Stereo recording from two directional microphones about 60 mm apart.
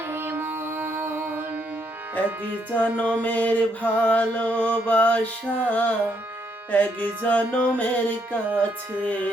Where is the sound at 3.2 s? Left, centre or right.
Left.